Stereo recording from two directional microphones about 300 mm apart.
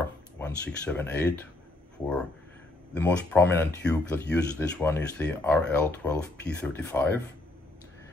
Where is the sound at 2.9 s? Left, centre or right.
Centre.